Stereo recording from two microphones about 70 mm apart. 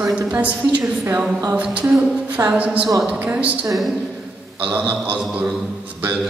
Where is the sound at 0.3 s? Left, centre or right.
Right.